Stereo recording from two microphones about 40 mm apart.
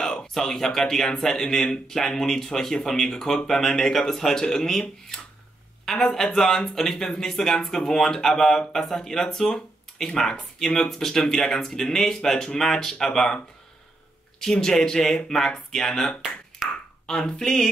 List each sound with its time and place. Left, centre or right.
0.0 s speech: centre
14.4 s speech: centre
16.6 s a sound: centre
17.0 s speech: centre